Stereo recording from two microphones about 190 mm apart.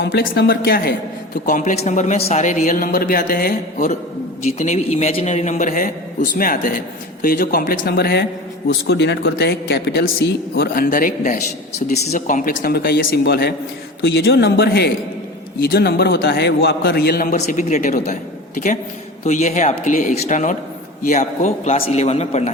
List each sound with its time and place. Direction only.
0.0 s a man's voice: 60° left (ahead or behind)
1.5 s a man's voice: 40° left (ahead or behind)
4.5 s a man's voice: 35° left (ahead or behind); by 17.3 s 55° left (ahead or behind)
17.3 s a man's voice: 40° left (ahead or behind)